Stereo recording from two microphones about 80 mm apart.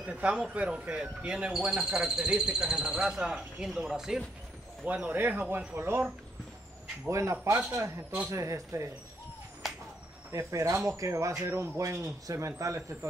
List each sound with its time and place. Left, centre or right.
0.0 s speech: centre
4.8 s speech: centre
7.1 s speech: right
9.6 s a sound: centre
10.3 s speech: right